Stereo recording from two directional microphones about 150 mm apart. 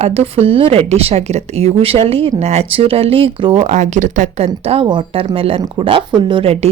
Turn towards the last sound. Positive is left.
turn(degrees=-35)  # may be behind; listen again after turning